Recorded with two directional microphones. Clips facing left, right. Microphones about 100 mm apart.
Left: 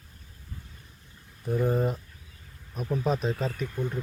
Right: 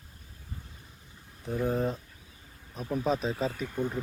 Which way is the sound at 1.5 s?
Centre (ahead or behind).